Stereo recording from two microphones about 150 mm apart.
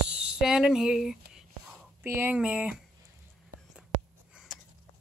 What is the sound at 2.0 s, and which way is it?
Speech, 15° right (ahead or behind).